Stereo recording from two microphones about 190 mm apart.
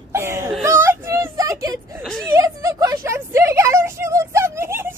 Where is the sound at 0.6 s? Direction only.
10° right (ahead or behind).